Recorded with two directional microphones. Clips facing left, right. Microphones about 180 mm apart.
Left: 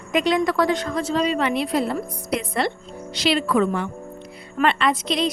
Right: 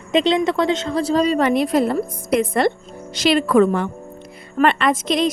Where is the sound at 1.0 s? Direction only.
35° right (ahead or behind).